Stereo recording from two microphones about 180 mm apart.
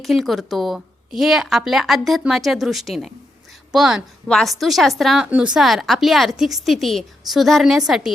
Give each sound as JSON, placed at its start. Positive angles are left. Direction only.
{"t": 0.0, "sound": "a woman's voice", "side_deg": 0}